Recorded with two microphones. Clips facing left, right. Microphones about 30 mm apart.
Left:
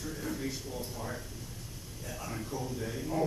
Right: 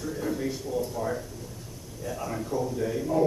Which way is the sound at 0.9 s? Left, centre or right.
Centre.